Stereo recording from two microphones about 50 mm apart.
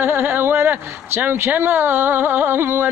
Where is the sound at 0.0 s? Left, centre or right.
Right.